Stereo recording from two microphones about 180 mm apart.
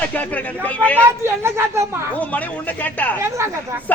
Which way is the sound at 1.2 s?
15° right (ahead or behind).